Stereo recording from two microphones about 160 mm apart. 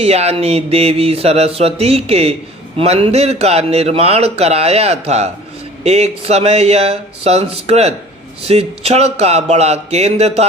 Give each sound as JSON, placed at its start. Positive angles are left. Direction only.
{"t": 0.0, "sound": "a man's voice", "side_deg": -40}